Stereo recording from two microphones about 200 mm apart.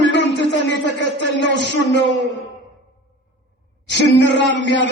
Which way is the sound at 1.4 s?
60° left (ahead or behind).